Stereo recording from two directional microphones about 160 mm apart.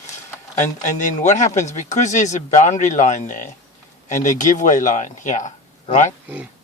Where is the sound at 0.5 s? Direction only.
50° left (ahead or behind).